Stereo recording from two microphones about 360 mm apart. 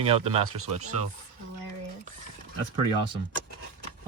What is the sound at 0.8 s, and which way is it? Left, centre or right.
Speech, right.